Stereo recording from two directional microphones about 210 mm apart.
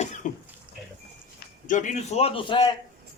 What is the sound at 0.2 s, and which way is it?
Speech, 35° left (ahead or behind).